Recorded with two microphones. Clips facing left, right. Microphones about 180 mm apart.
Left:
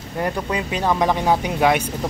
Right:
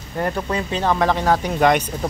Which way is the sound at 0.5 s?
15° left (ahead or behind).